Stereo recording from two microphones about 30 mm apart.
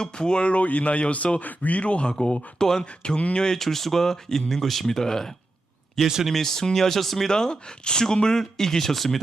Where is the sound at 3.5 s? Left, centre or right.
Centre.